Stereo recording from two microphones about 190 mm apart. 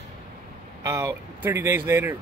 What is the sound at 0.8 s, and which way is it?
Speech, 15° right (ahead or behind).